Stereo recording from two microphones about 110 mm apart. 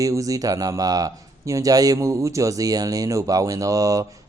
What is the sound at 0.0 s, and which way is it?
Speech, 30° right (ahead or behind).